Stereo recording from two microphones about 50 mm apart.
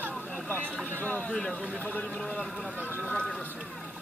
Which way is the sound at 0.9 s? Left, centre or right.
Left.